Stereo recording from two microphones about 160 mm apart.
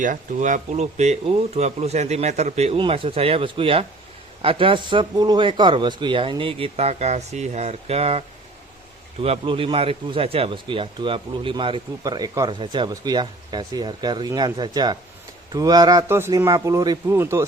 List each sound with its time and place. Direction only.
0.0 s speech: 55° right (ahead or behind)
9.2 s a man's voice: 35° right (ahead or behind); by 17.4 s 15° right (ahead or behind)